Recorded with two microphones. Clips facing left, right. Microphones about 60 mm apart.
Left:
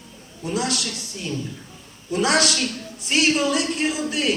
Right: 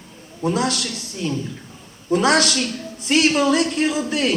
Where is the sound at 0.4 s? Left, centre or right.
Right.